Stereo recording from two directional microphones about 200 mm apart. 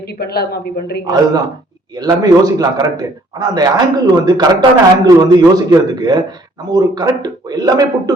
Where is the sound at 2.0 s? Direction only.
20° right (ahead or behind).